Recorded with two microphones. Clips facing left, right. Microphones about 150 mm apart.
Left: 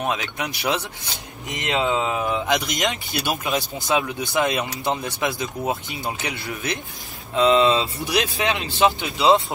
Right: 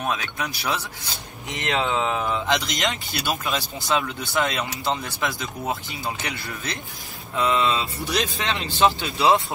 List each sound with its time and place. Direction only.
0.0 s speech: 20° left (ahead or behind)
7.3 s speech: 25° left (ahead or behind)
8.1 s speech: 5° left (ahead or behind)
8.7 s speech: 20° left (ahead or behind)